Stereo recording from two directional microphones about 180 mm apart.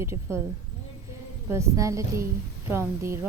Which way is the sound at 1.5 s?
15° right (ahead or behind).